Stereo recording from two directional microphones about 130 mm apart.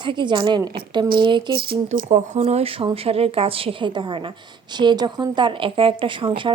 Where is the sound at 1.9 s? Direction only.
70° right (ahead or behind).